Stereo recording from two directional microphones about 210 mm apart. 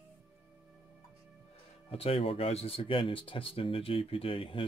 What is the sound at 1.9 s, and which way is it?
Speech, 25° left (ahead or behind).